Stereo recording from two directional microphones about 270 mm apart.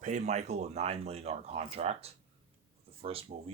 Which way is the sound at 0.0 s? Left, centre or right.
Right.